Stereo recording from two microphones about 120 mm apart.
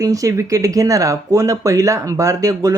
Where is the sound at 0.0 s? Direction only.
30° right (ahead or behind).